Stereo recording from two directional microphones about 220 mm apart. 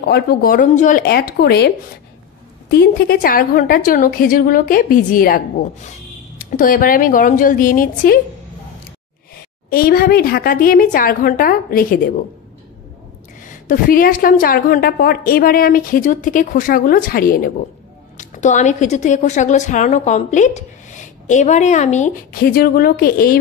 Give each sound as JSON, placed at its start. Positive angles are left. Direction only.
{"t": 0.1, "sound": "speech", "side_deg": 45}
{"t": 2.7, "sound": "a woman's voice", "side_deg": 45}
{"t": 9.7, "sound": "a woman's voice", "side_deg": 40}
{"t": 13.7, "sound": "a woman's voice", "side_deg": 40}